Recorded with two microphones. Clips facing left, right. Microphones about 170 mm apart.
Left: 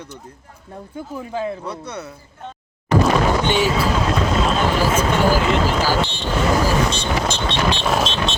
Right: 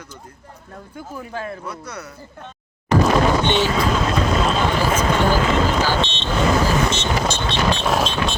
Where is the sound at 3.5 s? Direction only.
10° left (ahead or behind).